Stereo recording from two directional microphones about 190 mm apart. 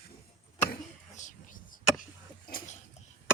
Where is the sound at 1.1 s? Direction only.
40° left (ahead or behind).